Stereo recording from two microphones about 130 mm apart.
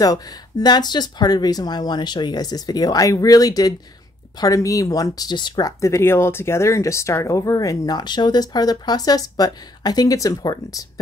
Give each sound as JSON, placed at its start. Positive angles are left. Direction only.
{"t": 0.0, "sound": "speech", "side_deg": 30}